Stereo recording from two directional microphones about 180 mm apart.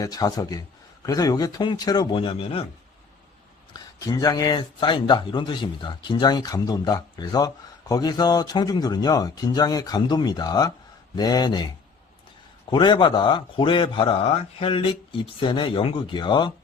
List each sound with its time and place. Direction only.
0.0 s speech: 20° left (ahead or behind)
3.7 s speech: 20° left (ahead or behind)
12.7 s speech: 25° left (ahead or behind)